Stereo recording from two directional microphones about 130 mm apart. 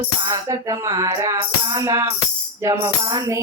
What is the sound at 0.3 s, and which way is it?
Tambourine, 25° right (ahead or behind).